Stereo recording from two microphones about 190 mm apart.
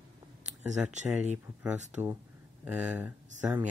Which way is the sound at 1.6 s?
5° right (ahead or behind).